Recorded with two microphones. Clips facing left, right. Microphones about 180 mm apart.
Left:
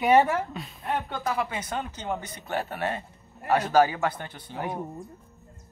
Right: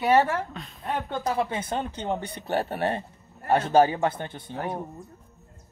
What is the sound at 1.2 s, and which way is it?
Speech, 30° right (ahead or behind).